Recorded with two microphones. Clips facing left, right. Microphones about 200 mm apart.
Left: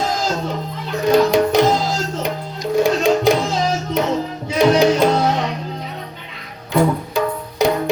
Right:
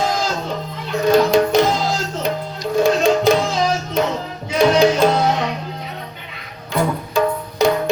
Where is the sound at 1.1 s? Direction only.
15° left (ahead or behind).